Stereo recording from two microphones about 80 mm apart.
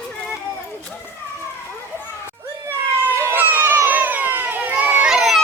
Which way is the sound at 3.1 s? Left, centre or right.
Right.